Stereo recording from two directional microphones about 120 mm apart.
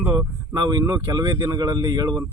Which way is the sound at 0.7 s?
35° right (ahead or behind).